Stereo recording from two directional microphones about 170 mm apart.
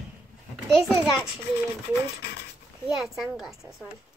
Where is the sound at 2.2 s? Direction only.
70° left (ahead or behind).